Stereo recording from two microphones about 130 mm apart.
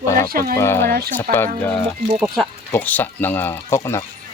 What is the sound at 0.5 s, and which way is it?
Speech, 20° left (ahead or behind).